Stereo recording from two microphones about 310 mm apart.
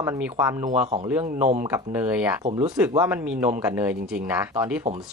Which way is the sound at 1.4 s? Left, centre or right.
Right.